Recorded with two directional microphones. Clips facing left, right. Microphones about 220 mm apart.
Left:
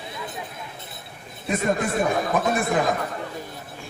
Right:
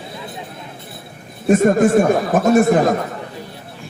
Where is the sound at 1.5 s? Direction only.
50° right (ahead or behind).